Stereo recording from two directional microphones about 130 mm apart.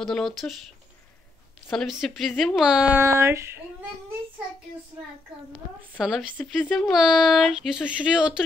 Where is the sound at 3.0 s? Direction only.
20° right (ahead or behind).